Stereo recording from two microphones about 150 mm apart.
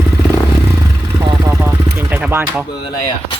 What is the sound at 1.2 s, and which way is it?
Vehicle, 25° right (ahead or behind).